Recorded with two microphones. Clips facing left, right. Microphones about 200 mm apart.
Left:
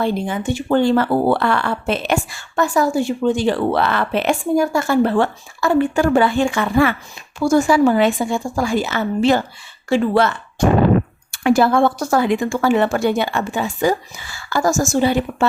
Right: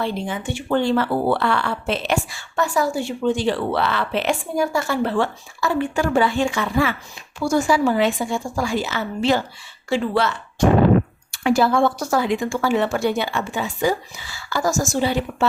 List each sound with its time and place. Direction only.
0.0 s speech: 45° left (ahead or behind)